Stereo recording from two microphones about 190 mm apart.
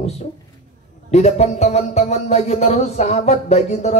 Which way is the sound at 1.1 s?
35° left (ahead or behind).